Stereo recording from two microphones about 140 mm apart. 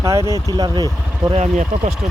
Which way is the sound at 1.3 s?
55° right (ahead or behind).